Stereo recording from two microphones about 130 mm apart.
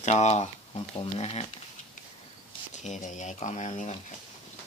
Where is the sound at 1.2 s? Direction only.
50° left (ahead or behind).